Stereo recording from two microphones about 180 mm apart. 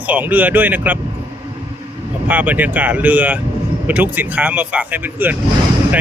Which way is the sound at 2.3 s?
10° right (ahead or behind).